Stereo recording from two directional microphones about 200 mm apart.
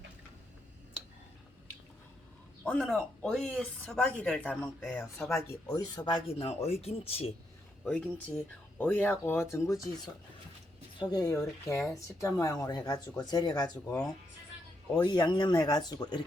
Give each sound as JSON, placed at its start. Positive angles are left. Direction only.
{"t": 2.6, "sound": "speech", "side_deg": 5}
{"t": 5.3, "sound": "speech", "side_deg": 15}
{"t": 7.9, "sound": "speech", "side_deg": 5}
{"t": 11.0, "sound": "speech", "side_deg": 20}
{"t": 13.8, "sound": "speech", "side_deg": 5}
{"t": 14.9, "sound": "speech", "side_deg": 20}